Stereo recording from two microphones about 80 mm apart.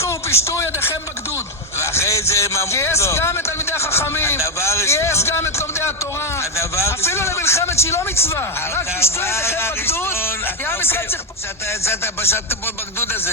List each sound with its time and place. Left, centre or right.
0.0 s a man's voice: left